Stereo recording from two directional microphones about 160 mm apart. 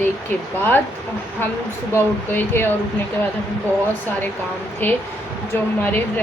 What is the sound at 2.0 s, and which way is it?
Speech, 15° left (ahead or behind).